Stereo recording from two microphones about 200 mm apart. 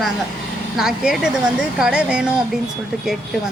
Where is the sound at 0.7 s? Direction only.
5° right (ahead or behind).